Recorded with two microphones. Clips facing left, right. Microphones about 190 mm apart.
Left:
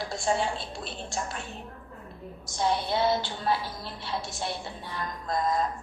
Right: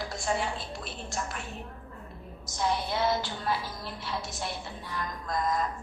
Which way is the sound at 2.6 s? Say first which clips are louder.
Left 3 dB; 30° left (ahead or behind).